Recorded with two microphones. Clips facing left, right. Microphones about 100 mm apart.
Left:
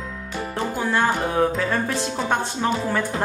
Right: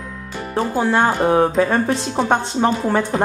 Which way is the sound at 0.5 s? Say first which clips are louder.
Right 6 dB; 25° right (ahead or behind).